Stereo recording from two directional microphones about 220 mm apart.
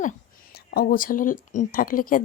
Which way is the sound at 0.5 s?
45° left (ahead or behind).